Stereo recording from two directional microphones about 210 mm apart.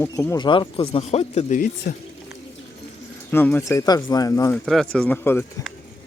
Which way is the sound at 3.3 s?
10° left (ahead or behind).